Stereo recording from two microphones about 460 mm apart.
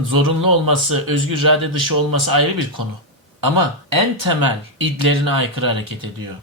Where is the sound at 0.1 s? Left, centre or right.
Right.